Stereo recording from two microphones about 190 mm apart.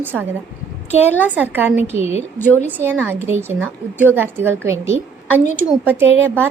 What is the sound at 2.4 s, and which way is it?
Speech, 10° left (ahead or behind).